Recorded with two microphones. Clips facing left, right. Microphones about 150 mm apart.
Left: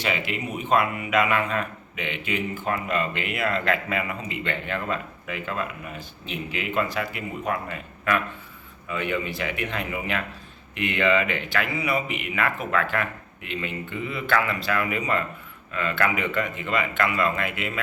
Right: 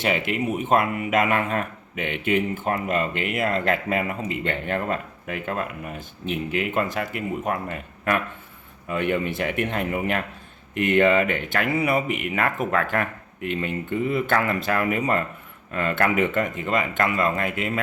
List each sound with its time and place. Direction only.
0.0 s speech: 50° right (ahead or behind)